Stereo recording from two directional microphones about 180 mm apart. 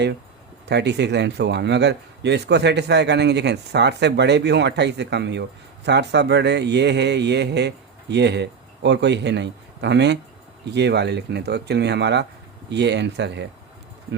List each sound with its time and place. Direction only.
0.7 s a man's voice: 70° right (ahead or behind)